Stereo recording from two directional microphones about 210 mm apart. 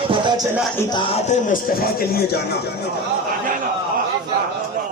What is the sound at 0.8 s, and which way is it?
A man's voice, 20° left (ahead or behind).